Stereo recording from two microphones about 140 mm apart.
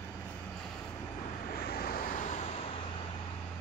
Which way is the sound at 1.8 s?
90° left.